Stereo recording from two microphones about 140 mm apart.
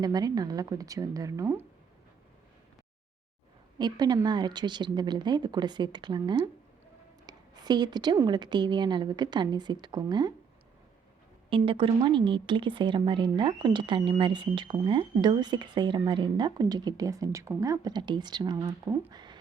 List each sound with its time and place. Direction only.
0.0 s a woman's voice: 30° right (ahead or behind)
3.8 s a woman's voice: 30° right (ahead or behind)
7.3 s a sound: 30° right (ahead or behind)
8.3 s a woman's voice: 30° right (ahead or behind)
11.4 s a woman's voice: 40° right (ahead or behind)
19.1 s a sound: 30° right (ahead or behind)